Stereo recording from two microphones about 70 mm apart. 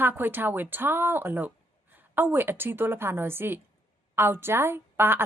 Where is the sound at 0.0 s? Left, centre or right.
Right.